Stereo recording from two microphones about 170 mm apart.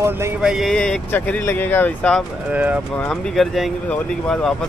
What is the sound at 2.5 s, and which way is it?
Speech, 10° right (ahead or behind).